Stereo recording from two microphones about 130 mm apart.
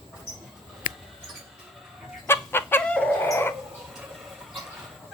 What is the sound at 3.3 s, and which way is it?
Dog, 20° left (ahead or behind).